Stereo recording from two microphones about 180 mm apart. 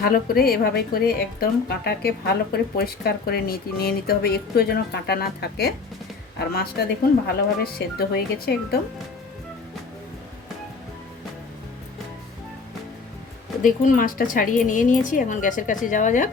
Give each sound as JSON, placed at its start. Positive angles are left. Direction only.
{"t": 0.0, "sound": "a woman's voice", "side_deg": 55}
{"t": 13.6, "sound": "a woman's voice", "side_deg": 45}